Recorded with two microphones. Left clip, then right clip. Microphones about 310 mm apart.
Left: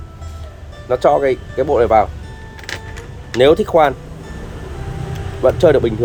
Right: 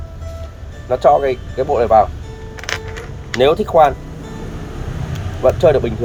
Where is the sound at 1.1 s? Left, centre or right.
Left.